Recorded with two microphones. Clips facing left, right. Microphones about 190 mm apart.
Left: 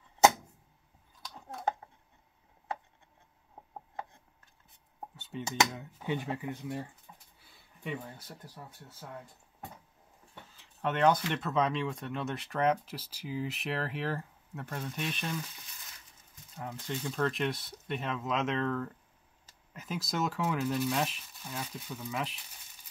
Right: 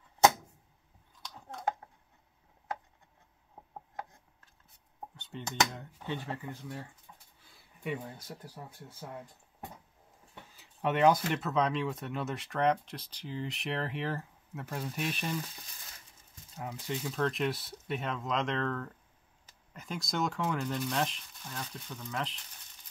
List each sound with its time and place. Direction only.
5.1 s speech: 5° left (ahead or behind)
7.1 s a sound: 25° left (ahead or behind)
7.8 s speech: 5° right (ahead or behind)
10.6 s speech: 10° right (ahead or behind)
16.5 s speech: 5° right (ahead or behind)